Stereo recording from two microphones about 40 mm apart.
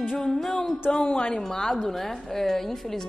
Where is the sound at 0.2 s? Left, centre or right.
Centre.